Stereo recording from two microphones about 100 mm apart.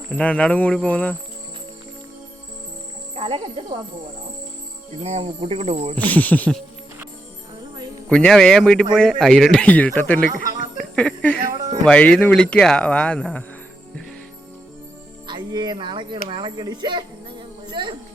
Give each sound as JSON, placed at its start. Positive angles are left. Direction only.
{"t": 0.1, "sound": "speech", "side_deg": 15}
{"t": 3.2, "sound": "speech", "side_deg": -70}
{"t": 5.0, "sound": "speech", "side_deg": -90}
{"t": 6.0, "sound": "speech", "side_deg": 15}
{"t": 8.1, "sound": "speech", "side_deg": 10}
{"t": 15.3, "sound": "speech", "side_deg": -45}
{"t": 17.7, "sound": "music", "side_deg": -50}